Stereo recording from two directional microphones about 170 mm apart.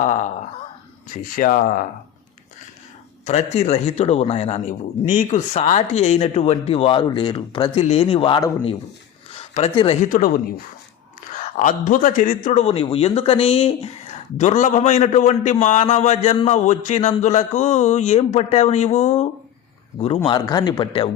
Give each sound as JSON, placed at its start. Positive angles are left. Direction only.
{"t": 0.0, "sound": "a man's voice", "side_deg": 45}
{"t": 3.2, "sound": "a man's voice", "side_deg": 40}
{"t": 11.3, "sound": "a man's voice", "side_deg": 50}